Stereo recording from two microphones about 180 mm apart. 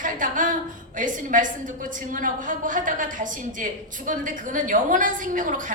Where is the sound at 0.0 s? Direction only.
45° right (ahead or behind).